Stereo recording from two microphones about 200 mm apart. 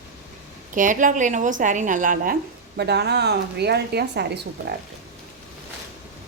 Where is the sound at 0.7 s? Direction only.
40° right (ahead or behind).